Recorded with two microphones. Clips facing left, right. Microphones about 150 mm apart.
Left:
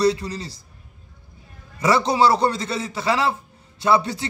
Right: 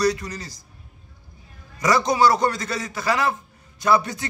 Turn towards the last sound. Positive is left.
turn(degrees=30)  # may be behind; listen again after turning